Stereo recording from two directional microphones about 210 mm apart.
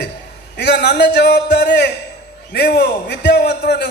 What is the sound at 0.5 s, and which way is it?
A man's voice, 55° left (ahead or behind).